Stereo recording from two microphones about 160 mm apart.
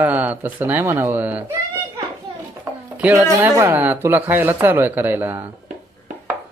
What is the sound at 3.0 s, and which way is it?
Speech, 10° right (ahead or behind).